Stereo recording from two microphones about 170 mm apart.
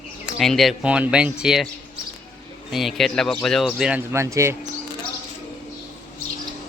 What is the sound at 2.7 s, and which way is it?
Speech, centre (ahead or behind).